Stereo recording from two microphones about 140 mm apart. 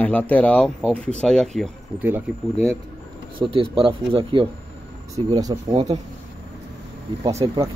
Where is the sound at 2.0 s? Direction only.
15° right (ahead or behind).